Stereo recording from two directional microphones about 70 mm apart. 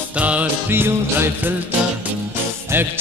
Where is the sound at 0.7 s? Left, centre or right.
Right.